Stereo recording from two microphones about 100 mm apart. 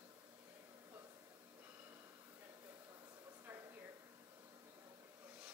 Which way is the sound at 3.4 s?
20° right (ahead or behind).